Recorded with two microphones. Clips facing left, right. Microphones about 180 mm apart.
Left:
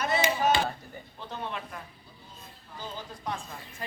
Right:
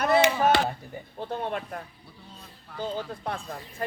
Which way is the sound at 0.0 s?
60° right (ahead or behind).